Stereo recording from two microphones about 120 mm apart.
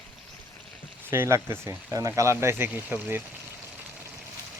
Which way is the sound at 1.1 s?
20° right (ahead or behind).